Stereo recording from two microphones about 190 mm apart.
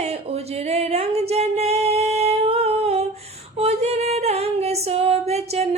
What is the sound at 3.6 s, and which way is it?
Female singing, 35° right (ahead or behind).